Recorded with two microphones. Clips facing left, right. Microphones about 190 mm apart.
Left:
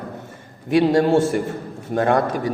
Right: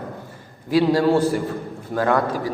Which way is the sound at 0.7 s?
25° left (ahead or behind).